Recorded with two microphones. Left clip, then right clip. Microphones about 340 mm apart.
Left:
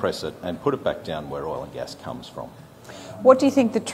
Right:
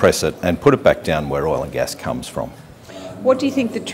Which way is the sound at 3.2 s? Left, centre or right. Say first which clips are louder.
Left 1 dB; left.